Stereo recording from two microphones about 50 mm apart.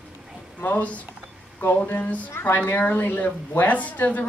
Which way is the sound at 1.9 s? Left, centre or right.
Left.